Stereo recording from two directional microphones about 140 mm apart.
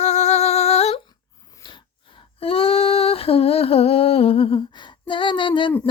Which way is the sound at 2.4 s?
40° left (ahead or behind).